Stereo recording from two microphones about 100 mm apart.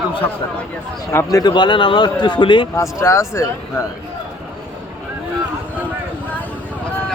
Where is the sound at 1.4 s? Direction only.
50° left (ahead or behind).